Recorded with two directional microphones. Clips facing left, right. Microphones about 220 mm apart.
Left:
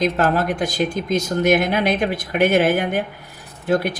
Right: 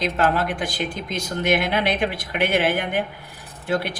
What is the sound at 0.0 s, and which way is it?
Speech, 45° left (ahead or behind).